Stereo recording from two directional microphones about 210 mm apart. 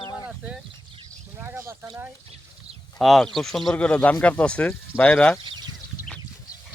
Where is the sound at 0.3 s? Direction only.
5° right (ahead or behind).